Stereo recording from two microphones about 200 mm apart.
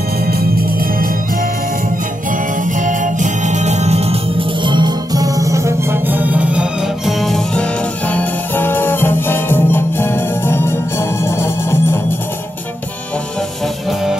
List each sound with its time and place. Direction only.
0.3 s organ: 50° right (ahead or behind)
2.6 s music: 40° right (ahead or behind); by 12.0 s 15° left (ahead or behind)